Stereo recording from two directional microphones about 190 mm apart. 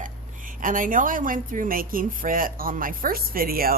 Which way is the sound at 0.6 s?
45° right (ahead or behind).